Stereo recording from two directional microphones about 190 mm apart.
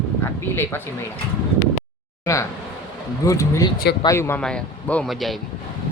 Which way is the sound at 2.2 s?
15° left (ahead or behind).